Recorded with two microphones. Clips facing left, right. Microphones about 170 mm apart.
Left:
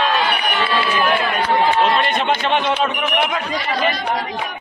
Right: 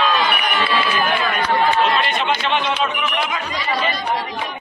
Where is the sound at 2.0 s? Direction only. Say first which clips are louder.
Left 2 dB; 50° left (ahead or behind).